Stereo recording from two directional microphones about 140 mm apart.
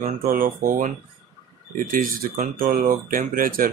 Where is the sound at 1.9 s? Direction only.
90° right.